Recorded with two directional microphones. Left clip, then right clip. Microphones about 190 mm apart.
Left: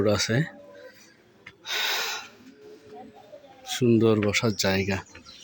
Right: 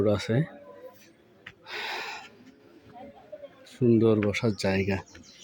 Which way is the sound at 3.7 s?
5° left (ahead or behind).